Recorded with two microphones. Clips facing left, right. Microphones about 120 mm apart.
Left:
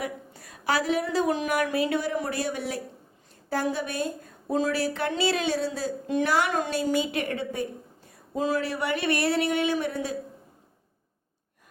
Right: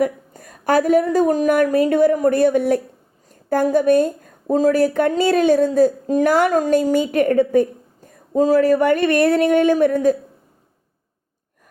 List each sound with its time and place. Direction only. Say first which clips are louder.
0.0 s speech: right 13 dB; 45° right (ahead or behind)